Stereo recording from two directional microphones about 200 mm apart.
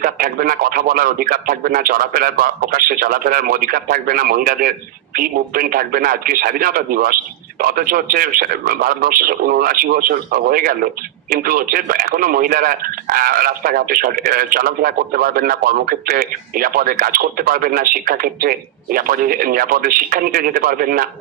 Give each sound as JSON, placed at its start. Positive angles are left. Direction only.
{"t": 0.0, "sound": "a man's voice", "side_deg": -45}